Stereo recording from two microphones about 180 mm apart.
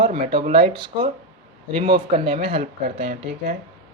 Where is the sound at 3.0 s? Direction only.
60° right (ahead or behind).